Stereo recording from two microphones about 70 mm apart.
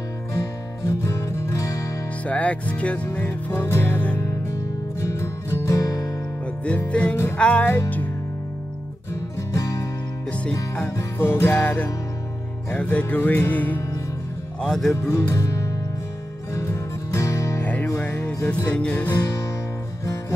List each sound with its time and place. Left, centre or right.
0.3 s music: left
2.2 s music: centre; by 4.0 s left
5.0 s music: left
6.6 s music: centre
9.5 s music: left
11.1 s music: left
11.5 s music: left
14.6 s speech: centre
15.1 s music: left
18.0 s music: centre